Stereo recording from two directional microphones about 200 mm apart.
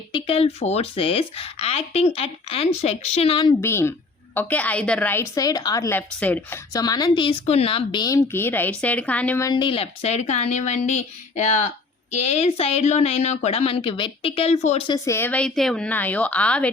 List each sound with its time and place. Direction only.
0.3 s a woman's voice: 30° left (ahead or behind)
3.6 s a woman's voice: 10° left (ahead or behind); by 14.8 s 35° left (ahead or behind)
14.8 s a woman's voice: 15° left (ahead or behind)